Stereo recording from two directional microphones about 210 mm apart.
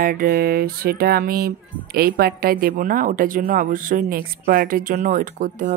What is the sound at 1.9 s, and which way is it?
A woman's voice, 45° right (ahead or behind).